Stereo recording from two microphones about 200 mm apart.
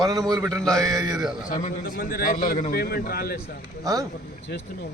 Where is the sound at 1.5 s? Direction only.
40° left (ahead or behind).